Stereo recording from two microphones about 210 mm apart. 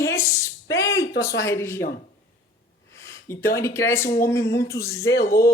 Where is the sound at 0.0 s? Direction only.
15° left (ahead or behind).